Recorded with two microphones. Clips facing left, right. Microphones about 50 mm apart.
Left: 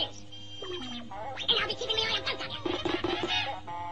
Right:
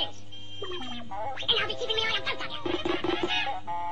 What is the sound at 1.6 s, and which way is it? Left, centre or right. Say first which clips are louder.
Speech: right 2 dB; centre.